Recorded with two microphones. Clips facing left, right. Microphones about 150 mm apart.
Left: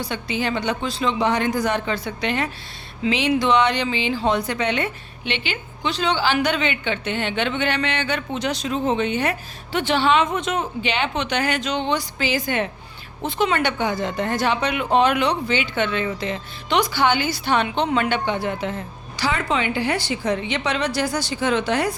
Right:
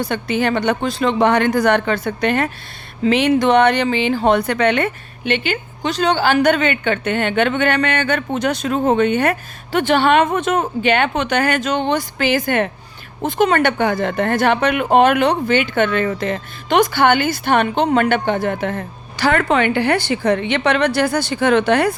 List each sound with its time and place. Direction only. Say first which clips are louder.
0.0 s a woman's voice: right 6 dB; 55° right (ahead or behind)